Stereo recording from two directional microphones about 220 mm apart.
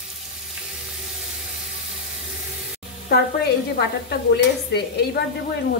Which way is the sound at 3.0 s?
50° left (ahead or behind).